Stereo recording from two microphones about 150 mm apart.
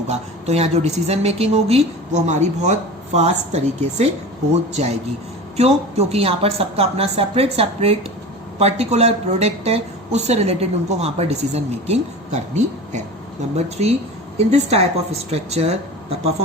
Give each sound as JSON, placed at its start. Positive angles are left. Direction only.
{"t": 0.1, "sound": "a woman's voice", "side_deg": -45}